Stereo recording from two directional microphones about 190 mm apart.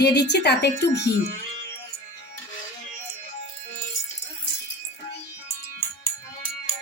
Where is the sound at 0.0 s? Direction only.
60° left (ahead or behind).